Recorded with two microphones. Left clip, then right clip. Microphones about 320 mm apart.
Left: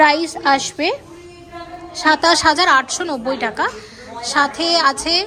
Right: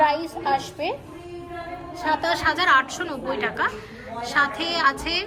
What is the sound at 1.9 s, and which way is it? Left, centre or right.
A woman's voice, left.